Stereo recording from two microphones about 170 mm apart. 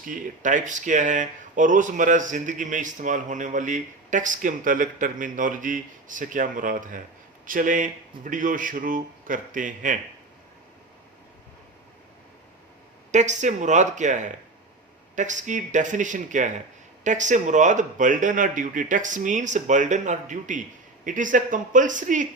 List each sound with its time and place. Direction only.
0.0 s speech: 50° right (ahead or behind)
13.1 s speech: 45° right (ahead or behind)